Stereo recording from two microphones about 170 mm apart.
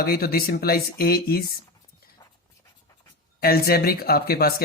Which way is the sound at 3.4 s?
65° left (ahead or behind).